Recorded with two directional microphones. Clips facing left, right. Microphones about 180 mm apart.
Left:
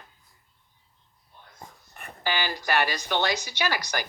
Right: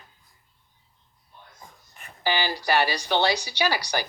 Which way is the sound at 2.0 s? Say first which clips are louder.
Left 6 dB; 60° left (ahead or behind).